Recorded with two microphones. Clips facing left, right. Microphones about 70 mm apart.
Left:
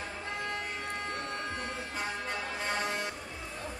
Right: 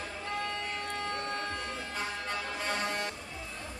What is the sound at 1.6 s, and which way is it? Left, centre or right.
Vehicle, centre.